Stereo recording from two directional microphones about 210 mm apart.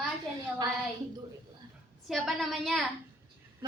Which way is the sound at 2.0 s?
Centre (ahead or behind).